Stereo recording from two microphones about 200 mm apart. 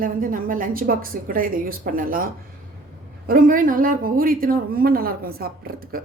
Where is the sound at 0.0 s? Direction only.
45° right (ahead or behind).